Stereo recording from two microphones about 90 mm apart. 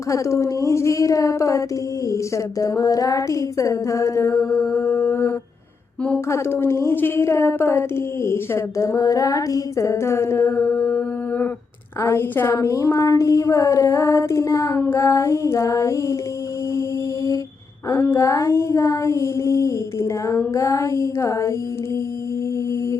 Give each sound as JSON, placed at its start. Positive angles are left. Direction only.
{"t": 0.1, "sound": "a woman's voice", "side_deg": 35}
{"t": 6.3, "sound": "a woman's voice", "side_deg": 30}
{"t": 17.8, "sound": "a woman's voice", "side_deg": 25}